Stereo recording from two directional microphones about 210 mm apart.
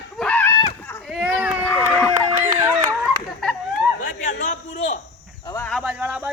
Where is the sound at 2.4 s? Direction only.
10° right (ahead or behind).